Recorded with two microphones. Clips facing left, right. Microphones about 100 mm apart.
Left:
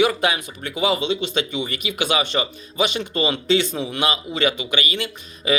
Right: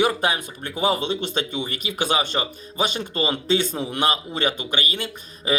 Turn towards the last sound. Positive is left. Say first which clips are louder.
# left 2 dB
turn(degrees=-40)  # may be behind; listen again after turning